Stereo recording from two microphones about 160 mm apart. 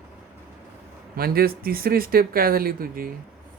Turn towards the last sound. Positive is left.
turn(degrees=-60)  # may be behind; listen again after turning